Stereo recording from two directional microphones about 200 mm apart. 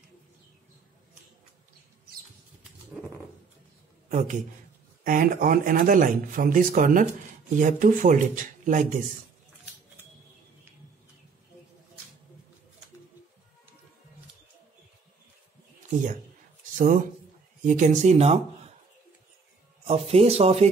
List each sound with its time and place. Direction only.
4.1 s a man's voice: 35° right (ahead or behind)
16.7 s speech: 40° right (ahead or behind)
19.9 s speech: 30° right (ahead or behind)